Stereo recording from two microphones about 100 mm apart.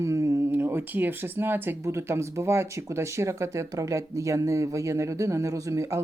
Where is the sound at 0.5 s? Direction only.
20° right (ahead or behind).